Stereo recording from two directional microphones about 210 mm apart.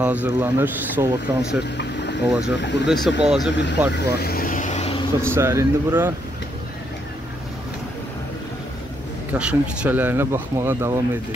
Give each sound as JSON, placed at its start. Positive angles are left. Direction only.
{"t": 0.0, "sound": "speech", "side_deg": -5}
{"t": 2.5, "sound": "speech", "side_deg": 55}
{"t": 2.9, "sound": "speech", "side_deg": 0}
{"t": 3.9, "sound": "vehicle", "side_deg": 50}
{"t": 5.2, "sound": "speech", "side_deg": -10}
{"t": 9.3, "sound": "speech", "side_deg": -5}